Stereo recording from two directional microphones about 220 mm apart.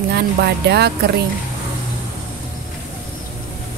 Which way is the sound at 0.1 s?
50° right (ahead or behind).